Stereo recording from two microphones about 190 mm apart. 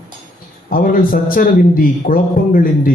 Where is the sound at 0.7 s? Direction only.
45° left (ahead or behind).